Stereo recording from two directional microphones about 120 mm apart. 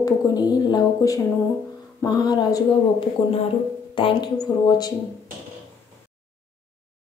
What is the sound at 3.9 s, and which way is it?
Speech, 45° left (ahead or behind).